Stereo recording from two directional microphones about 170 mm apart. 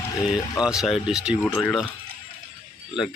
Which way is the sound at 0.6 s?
5° right (ahead or behind).